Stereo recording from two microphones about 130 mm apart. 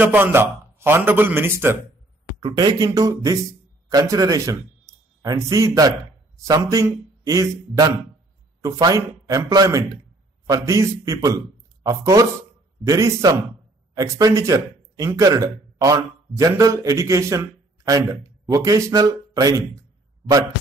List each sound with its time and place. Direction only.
0.0 s a man's voice: 15° right (ahead or behind)
2.4 s a man's voice: 35° right (ahead or behind)